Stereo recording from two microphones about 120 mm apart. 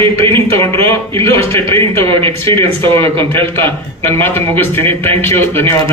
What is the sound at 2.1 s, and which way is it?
Speech, 50° right (ahead or behind).